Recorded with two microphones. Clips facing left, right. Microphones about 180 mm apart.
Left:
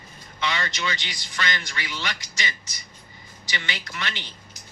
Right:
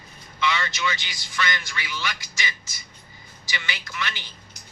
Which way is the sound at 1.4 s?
40° left (ahead or behind).